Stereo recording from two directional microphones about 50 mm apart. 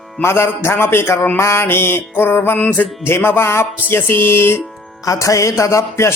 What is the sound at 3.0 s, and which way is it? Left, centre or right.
Music, left.